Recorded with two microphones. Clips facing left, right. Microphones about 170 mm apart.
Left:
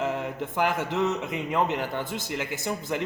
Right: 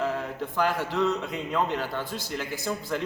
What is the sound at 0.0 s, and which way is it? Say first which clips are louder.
A man's voice: even; 20° left (ahead or behind).